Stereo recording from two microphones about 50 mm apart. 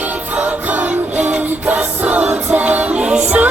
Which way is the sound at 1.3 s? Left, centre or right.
Right.